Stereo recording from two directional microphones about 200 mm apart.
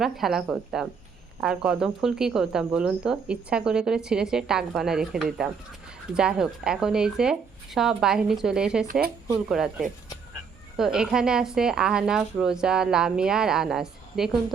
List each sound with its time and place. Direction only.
0.0 s speech: centre (ahead or behind)
8.9 s speech: 50° right (ahead or behind)
9.3 s speech: 5° right (ahead or behind)